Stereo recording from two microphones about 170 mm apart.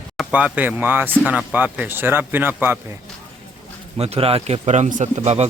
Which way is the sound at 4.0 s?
35° right (ahead or behind).